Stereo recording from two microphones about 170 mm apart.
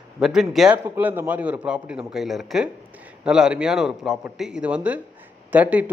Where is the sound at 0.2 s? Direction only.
Centre (ahead or behind).